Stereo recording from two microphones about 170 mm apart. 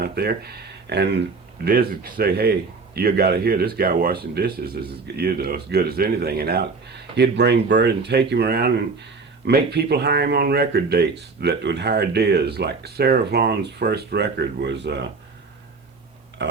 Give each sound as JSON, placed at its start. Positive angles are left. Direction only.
{"t": 0.0, "sound": "speech", "side_deg": -65}
{"t": 1.6, "sound": "speech", "side_deg": -60}
{"t": 7.2, "sound": "speech", "side_deg": -80}
{"t": 16.4, "sound": "a sound", "side_deg": -90}